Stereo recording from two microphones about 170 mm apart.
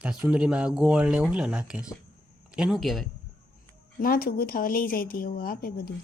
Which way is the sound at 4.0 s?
60° left (ahead or behind).